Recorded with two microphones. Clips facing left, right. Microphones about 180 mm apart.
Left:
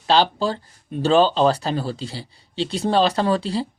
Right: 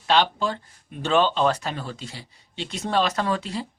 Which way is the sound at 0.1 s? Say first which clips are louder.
Left 3 dB; 35° left (ahead or behind).